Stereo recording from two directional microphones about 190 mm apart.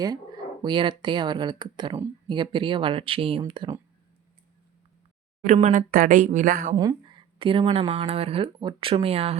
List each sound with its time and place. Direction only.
0.6 s speech: 25° right (ahead or behind)
5.5 s speech: 35° right (ahead or behind)
6.7 s speech: 20° right (ahead or behind)